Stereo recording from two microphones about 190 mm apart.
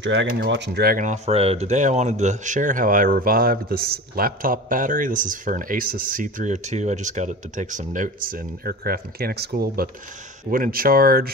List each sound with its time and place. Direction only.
0.0 s speech: 75° right (ahead or behind)
0.5 s speech: 65° right (ahead or behind)